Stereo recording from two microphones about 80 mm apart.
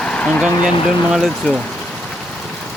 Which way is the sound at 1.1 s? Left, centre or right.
Centre.